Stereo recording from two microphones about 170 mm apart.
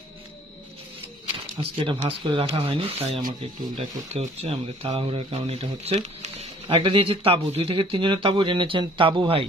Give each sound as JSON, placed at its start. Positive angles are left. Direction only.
{"t": 1.6, "sound": "speech", "side_deg": -30}